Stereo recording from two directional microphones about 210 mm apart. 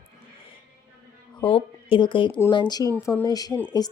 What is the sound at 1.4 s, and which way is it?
Speech, 25° left (ahead or behind).